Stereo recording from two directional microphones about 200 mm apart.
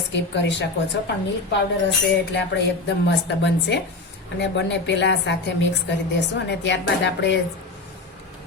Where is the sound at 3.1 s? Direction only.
60° left (ahead or behind).